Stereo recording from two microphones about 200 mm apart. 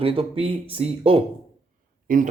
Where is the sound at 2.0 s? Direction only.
40° right (ahead or behind).